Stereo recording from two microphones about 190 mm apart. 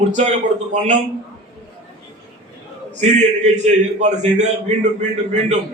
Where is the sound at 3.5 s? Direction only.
35° right (ahead or behind).